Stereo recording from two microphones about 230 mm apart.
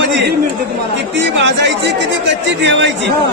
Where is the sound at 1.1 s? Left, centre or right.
Right.